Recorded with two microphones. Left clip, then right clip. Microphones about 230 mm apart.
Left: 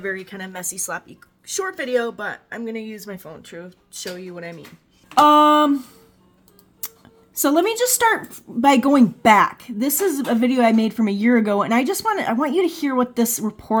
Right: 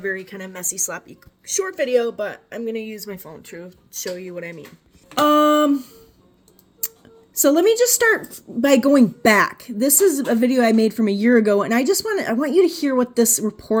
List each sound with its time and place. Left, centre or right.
0.0 s a woman's voice: centre
7.3 s a woman's voice: centre